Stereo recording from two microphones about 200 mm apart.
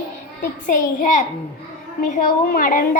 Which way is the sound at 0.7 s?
40° left (ahead or behind).